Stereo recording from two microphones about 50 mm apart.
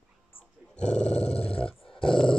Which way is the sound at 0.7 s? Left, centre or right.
Left.